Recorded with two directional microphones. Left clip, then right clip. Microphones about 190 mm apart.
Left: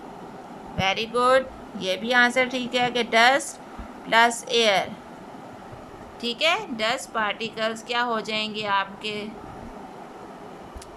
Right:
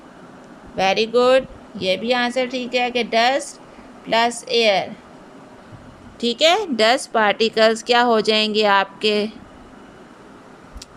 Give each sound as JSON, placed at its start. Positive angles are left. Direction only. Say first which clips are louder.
{"t": 0.8, "sound": "speech", "louder": "right 6 dB", "side_deg": -20}
{"t": 6.1, "sound": "a woman's voice", "louder": "right 7 dB", "side_deg": -20}